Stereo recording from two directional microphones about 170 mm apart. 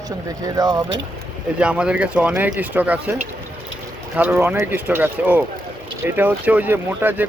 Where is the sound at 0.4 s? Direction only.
20° right (ahead or behind).